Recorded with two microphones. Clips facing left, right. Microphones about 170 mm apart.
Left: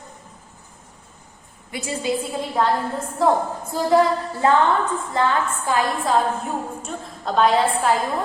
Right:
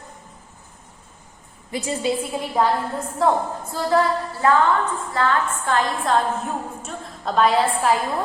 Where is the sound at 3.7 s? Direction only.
15° left (ahead or behind).